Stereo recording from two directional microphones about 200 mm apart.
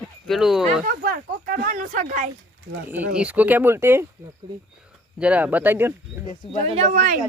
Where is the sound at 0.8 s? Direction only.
50° right (ahead or behind).